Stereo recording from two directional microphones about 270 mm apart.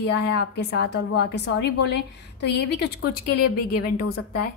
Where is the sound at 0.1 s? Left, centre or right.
Left.